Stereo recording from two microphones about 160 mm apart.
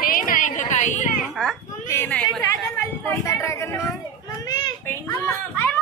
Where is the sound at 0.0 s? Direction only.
60° left (ahead or behind).